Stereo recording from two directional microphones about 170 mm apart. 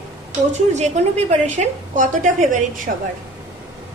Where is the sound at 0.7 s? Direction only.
40° right (ahead or behind).